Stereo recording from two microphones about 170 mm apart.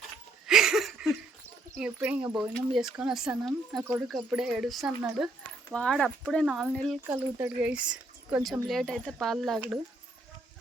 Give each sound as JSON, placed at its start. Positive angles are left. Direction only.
{"t": 0.4, "sound": "a sound", "side_deg": -5}
{"t": 1.7, "sound": "speech", "side_deg": -5}
{"t": 7.1, "sound": "speech", "side_deg": -10}